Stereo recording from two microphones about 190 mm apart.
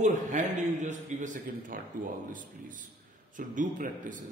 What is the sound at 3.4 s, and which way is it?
Speech, 45° right (ahead or behind).